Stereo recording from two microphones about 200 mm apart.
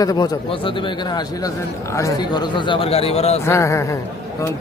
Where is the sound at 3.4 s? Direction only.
15° left (ahead or behind).